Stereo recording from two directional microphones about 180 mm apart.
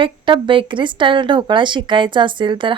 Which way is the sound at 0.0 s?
30° right (ahead or behind).